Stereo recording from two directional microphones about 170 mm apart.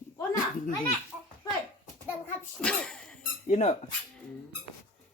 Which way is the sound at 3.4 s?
40° left (ahead or behind).